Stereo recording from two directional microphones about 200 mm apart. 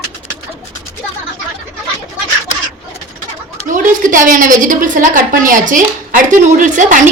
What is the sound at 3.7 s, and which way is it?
A woman's voice, 40° right (ahead or behind).